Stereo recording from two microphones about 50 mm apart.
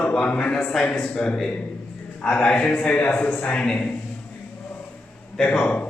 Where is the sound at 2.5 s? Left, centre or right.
Left.